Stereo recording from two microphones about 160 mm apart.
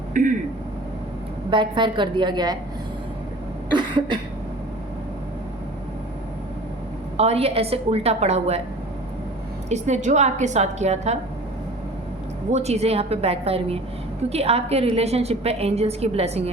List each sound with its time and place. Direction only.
0.1 s speech: 55° right (ahead or behind)
1.5 s a woman's voice: 30° right (ahead or behind)
3.8 s cough: 30° right (ahead or behind)
7.2 s a woman's voice: 40° right (ahead or behind)
9.6 s a woman's voice: 45° right (ahead or behind)
12.5 s a woman's voice: 45° right (ahead or behind)